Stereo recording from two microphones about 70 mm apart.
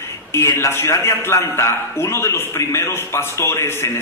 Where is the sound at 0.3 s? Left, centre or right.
Left.